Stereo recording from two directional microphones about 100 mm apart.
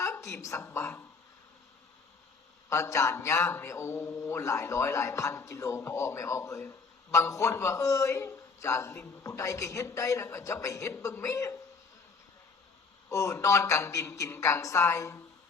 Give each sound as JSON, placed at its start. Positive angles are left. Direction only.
{"t": 0.0, "sound": "a sound", "side_deg": 30}
{"t": 0.4, "sound": "mantra", "side_deg": 30}
{"t": 2.6, "sound": "mantra", "side_deg": 30}
{"t": 13.1, "sound": "speech", "side_deg": 30}